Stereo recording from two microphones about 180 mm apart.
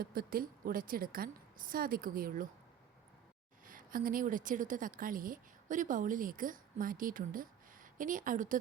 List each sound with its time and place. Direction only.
0.0 s a woman's voice: 55° right (ahead or behind)
3.7 s a woman's voice: 50° right (ahead or behind)